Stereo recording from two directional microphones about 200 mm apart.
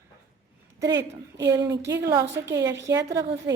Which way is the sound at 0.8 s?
20° right (ahead or behind).